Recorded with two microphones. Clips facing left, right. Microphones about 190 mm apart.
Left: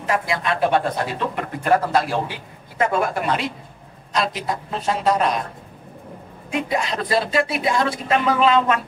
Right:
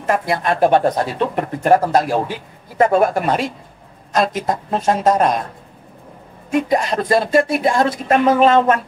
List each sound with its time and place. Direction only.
0.0 s speech: 50° right (ahead or behind)
6.5 s speech: 45° right (ahead or behind)